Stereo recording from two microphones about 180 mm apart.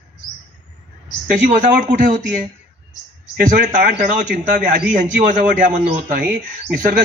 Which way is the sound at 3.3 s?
45° right (ahead or behind).